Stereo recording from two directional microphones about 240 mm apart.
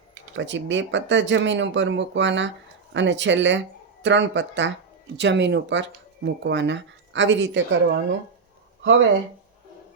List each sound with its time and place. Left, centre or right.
0.3 s speech: right
8.8 s speech: right